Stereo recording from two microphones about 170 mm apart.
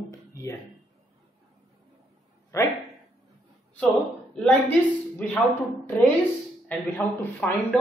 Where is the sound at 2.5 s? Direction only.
20° left (ahead or behind).